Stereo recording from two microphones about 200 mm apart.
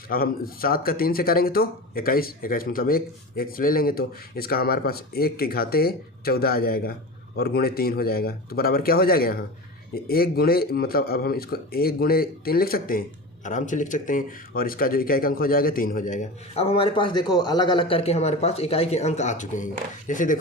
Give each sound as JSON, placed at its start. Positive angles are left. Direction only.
{"t": 0.1, "sound": "a man's voice", "side_deg": 45}